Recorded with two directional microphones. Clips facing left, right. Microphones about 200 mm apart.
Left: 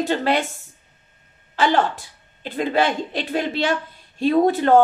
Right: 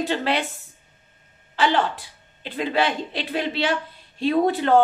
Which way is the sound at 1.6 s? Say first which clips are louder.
Left 2 dB; 45° left (ahead or behind).